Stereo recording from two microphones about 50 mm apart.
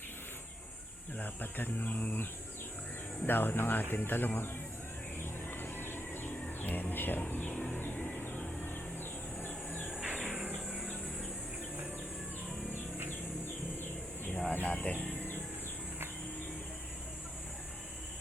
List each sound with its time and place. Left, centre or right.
1.2 s speech: left
3.2 s speech: left
5.2 s bird: left
6.6 s music: left
7.5 s music: left
7.9 s a sound: left
8.2 s a sound: left
10.1 s music: right
14.5 s speech: left